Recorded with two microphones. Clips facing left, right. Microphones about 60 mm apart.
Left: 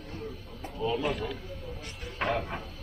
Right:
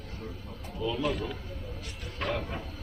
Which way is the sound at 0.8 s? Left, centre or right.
Left.